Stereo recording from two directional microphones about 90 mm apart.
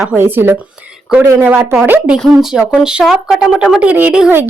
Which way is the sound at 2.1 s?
Centre (ahead or behind).